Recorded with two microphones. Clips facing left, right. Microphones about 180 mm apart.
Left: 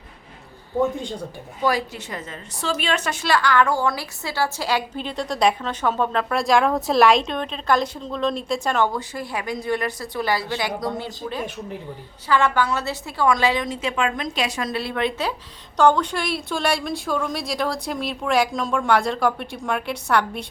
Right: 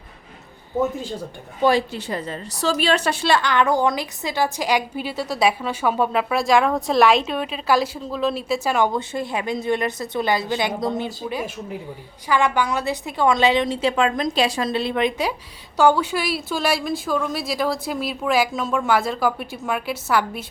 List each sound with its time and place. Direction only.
0.8 s a woman's voice: 5° right (ahead or behind)
1.6 s a woman's voice: 30° right (ahead or behind); by 8.9 s 10° right (ahead or behind)
8.9 s a woman's voice: 25° right (ahead or behind)
11.2 s a woman's voice: 10° right (ahead or behind)